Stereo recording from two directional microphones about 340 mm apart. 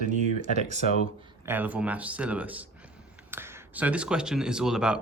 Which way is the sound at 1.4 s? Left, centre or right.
Centre.